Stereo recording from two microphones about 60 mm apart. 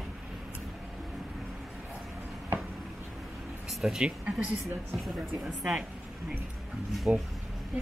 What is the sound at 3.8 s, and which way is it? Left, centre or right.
Speech, centre.